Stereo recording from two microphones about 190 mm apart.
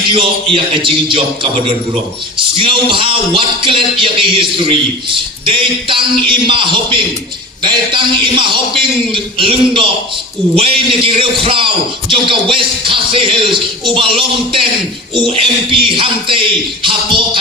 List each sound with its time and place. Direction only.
0.1 s music: 25° right (ahead or behind)
2.6 s music: 30° right (ahead or behind)